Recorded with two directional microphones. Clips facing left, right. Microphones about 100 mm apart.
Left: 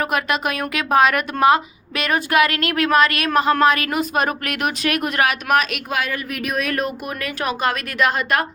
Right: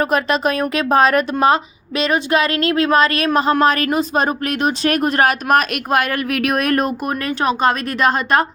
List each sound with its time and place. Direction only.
0.0 s a woman's voice: 30° right (ahead or behind)
7.4 s speech: 30° right (ahead or behind)